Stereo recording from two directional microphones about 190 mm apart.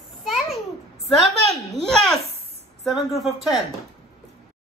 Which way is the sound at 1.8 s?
5° left (ahead or behind).